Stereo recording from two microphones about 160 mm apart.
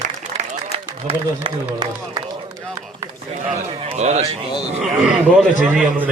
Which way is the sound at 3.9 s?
45° right (ahead or behind).